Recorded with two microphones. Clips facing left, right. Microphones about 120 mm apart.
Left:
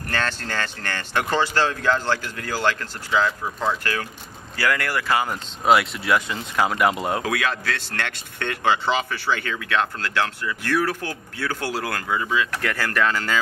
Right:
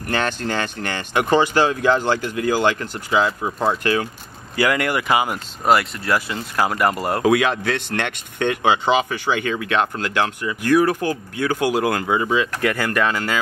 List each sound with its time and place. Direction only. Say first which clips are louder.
0.1 s speech: right 5 dB; 15° right (ahead or behind)
5.7 s speech: right 1 dB; centre (ahead or behind)
7.2 s speech: right 7 dB; 20° right (ahead or behind)